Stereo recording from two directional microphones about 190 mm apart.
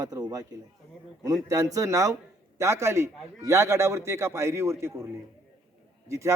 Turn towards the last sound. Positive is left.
turn(degrees=-15)  # may be behind; listen again after turning